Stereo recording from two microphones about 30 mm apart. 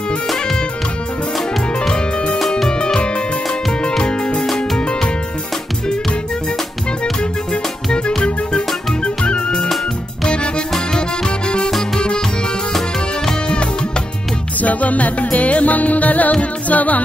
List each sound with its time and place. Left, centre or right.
4.0 s music: left
8.2 s music: left
14.6 s music: left